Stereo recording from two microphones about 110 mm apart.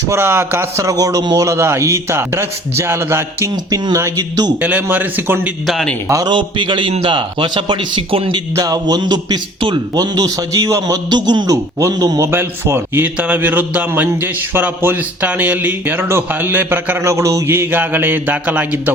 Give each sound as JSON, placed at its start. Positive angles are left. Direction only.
{"t": 0.1, "sound": "a man's voice", "side_deg": -20}
{"t": 1.5, "sound": "a man's voice", "side_deg": -25}
{"t": 3.5, "sound": "a man's voice", "side_deg": -35}
{"t": 4.6, "sound": "speech", "side_deg": -15}
{"t": 5.6, "sound": "a man's voice", "side_deg": 0}
{"t": 6.1, "sound": "a man's voice", "side_deg": -30}
{"t": 6.3, "sound": "speech", "side_deg": -45}
{"t": 8.5, "sound": "a man's voice", "side_deg": -35}
{"t": 12.2, "sound": "speech", "side_deg": -20}